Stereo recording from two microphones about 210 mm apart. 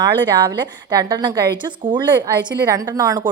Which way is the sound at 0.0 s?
15° right (ahead or behind).